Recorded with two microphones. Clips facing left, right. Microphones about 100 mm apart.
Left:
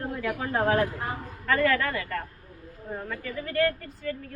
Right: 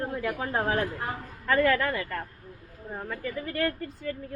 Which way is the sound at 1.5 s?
20° right (ahead or behind).